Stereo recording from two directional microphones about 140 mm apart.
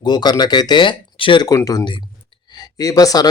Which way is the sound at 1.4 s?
25° left (ahead or behind).